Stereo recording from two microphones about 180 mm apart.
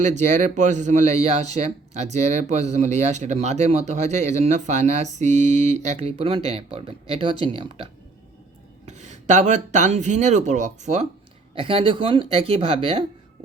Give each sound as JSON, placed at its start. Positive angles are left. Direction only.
{"t": 0.0, "sound": "speech", "side_deg": -40}
{"t": 8.9, "sound": "speech", "side_deg": -40}
{"t": 11.5, "sound": "speech", "side_deg": -30}